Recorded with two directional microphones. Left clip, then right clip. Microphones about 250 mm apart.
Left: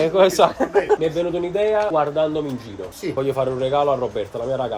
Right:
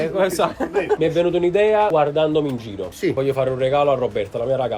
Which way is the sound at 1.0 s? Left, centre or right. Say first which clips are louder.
Right 4 dB; centre.